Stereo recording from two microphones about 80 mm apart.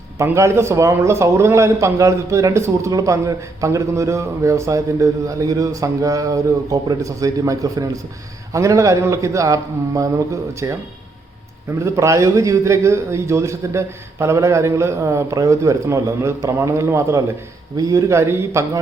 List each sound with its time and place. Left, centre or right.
0.3 s a man's voice: right
11.8 s a man's voice: right